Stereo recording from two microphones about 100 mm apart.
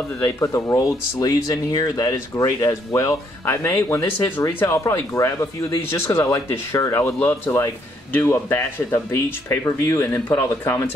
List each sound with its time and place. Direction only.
0.2 s speech: 30° left (ahead or behind)
7.2 s speech: 20° left (ahead or behind)